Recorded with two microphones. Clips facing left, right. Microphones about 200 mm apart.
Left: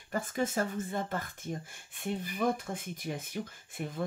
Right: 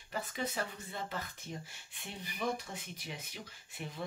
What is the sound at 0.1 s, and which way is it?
Speech, 50° left (ahead or behind).